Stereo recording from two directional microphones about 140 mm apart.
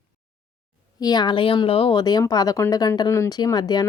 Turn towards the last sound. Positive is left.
turn(degrees=30)  # may be behind; listen again after turning